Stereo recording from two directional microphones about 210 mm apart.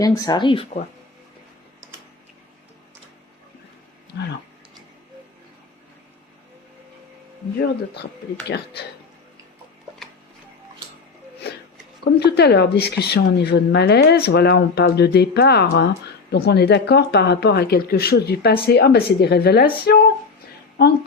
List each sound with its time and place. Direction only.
0.0 s speech: 20° left (ahead or behind)
8.4 s speech: 50° left (ahead or behind)
12.0 s speech: 50° left (ahead or behind)